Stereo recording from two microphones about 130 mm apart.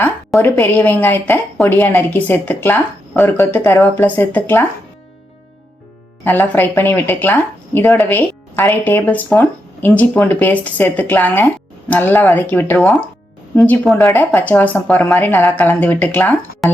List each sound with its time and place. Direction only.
0.3 s speech: 15° left (ahead or behind)
6.2 s speech: 15° left (ahead or behind)